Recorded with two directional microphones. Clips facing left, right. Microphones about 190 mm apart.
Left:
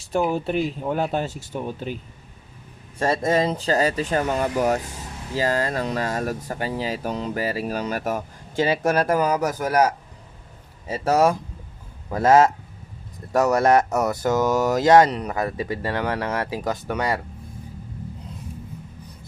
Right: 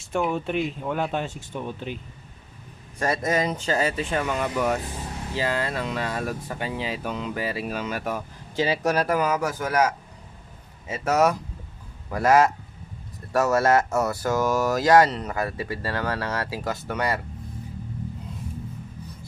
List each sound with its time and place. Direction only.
0.0 s speech: 35° left (ahead or behind)
3.0 s speech: 30° left (ahead or behind); by 17.2 s 15° left (ahead or behind)